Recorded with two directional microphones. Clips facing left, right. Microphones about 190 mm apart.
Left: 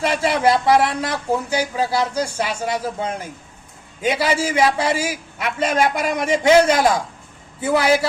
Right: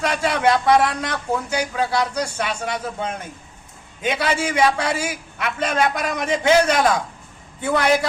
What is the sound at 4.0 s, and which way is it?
A man's voice, 5° left (ahead or behind).